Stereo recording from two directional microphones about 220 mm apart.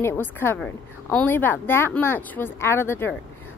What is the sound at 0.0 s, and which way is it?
A woman's voice, 10° left (ahead or behind).